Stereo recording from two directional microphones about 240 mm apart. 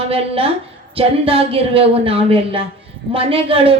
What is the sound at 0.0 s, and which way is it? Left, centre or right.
A woman's voice, right.